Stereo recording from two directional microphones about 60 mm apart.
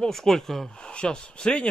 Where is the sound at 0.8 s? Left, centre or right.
Centre.